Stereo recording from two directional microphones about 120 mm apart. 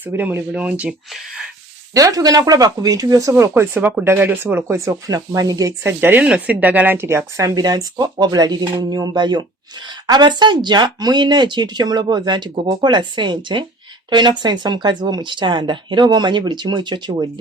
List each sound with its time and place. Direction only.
0.0 s speech: 15° right (ahead or behind)
1.9 s speech: 30° right (ahead or behind)